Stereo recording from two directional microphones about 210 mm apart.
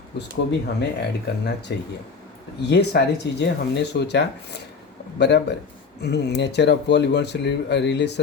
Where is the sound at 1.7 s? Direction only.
55° left (ahead or behind).